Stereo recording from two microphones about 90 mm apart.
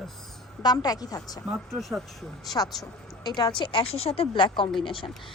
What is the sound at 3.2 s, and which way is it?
Speech, 50° left (ahead or behind).